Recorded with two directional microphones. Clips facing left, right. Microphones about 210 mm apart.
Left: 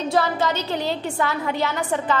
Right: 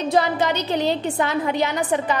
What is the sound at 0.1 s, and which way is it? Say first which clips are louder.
A woman's voice: right 2 dB; 15° right (ahead or behind).